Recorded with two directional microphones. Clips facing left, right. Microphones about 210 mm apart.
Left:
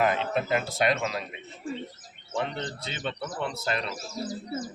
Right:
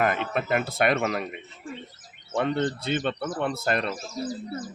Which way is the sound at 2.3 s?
55° right (ahead or behind).